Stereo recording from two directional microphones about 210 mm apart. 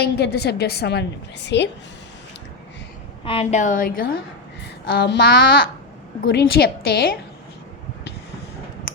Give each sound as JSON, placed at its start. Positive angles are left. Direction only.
{"t": 0.0, "sound": "a woman's voice", "side_deg": 50}
{"t": 3.2, "sound": "a woman's voice", "side_deg": 30}